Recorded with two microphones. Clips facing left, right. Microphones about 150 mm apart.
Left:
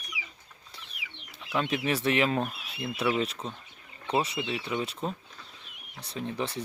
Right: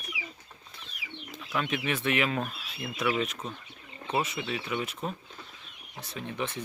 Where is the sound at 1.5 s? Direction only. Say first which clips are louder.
Left 2 dB; 30° left (ahead or behind).